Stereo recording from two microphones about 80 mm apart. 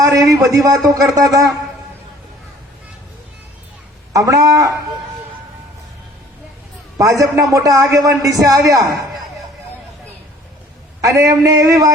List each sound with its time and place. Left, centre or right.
0.0 s a man's voice: right
4.1 s a man's voice: right
7.0 s a man's voice: right
11.0 s a man's voice: right